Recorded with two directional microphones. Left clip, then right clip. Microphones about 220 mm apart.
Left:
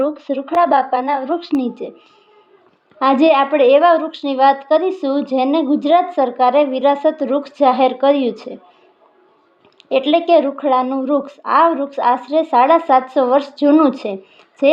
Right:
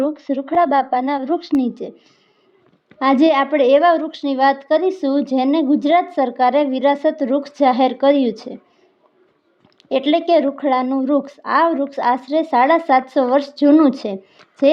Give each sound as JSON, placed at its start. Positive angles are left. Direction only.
{"t": 0.5, "sound": "a woman's voice", "side_deg": -50}
{"t": 1.4, "sound": "a woman's voice", "side_deg": 0}
{"t": 1.6, "sound": "a woman's voice", "side_deg": -60}
{"t": 3.0, "sound": "a woman's voice", "side_deg": -60}
{"t": 9.9, "sound": "a woman's voice", "side_deg": -60}